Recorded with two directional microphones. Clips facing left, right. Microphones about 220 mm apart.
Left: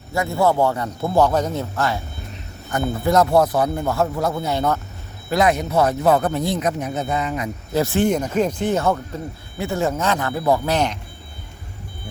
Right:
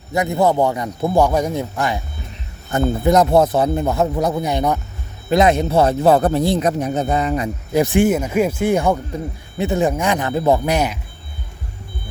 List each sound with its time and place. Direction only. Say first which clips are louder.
0.1 s speech: right 2 dB; 20° right (ahead or behind); by 7.4 s 40° right (ahead or behind)
7.7 s speech: right 3 dB; 15° right (ahead or behind)